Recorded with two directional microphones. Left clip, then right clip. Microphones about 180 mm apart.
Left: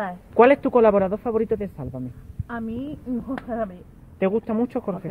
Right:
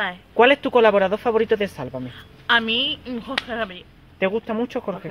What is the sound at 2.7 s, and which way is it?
Speech, 50° right (ahead or behind).